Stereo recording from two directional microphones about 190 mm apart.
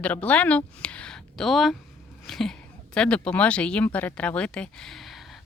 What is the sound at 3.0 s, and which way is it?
Speech, 5° left (ahead or behind).